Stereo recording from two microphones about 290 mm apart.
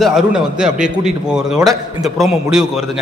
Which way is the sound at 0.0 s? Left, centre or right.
Centre.